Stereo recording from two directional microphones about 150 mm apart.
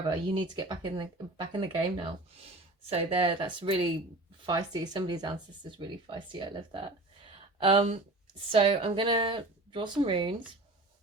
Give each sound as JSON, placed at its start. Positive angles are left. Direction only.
{"t": 0.3, "sound": "speech", "side_deg": -30}
{"t": 7.3, "sound": "a sound", "side_deg": -35}
{"t": 8.4, "sound": "speech", "side_deg": -40}